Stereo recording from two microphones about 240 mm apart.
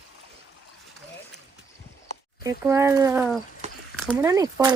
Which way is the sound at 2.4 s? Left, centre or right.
Centre.